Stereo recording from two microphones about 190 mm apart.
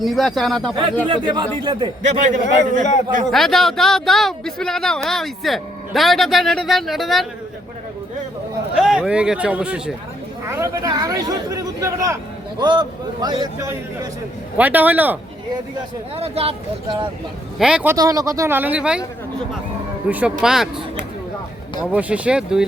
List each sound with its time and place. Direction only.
0.0 s speech: centre (ahead or behind)
1.0 s a man's voice: 25° right (ahead or behind)
2.0 s a man's voice: 40° right (ahead or behind)
3.3 s speech: centre (ahead or behind)
8.7 s speech: 5° right (ahead or behind)
10.5 s a man's voice: 20° right (ahead or behind)
16.1 s a man's voice: 30° right (ahead or behind)
17.6 s speech: 5° right (ahead or behind)
17.9 s speech: 20° right (ahead or behind)
20.1 s speech: 10° right (ahead or behind)
21.8 s speech: 5° right (ahead or behind)